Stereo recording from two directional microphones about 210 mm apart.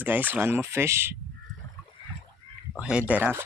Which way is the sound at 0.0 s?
10° right (ahead or behind).